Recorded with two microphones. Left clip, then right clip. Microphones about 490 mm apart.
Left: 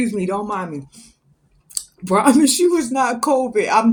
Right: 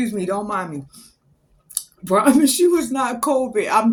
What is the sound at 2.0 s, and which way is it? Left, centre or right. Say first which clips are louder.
Music: left 1 dB; right.